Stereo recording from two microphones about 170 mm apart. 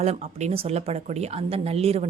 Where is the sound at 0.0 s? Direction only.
40° right (ahead or behind).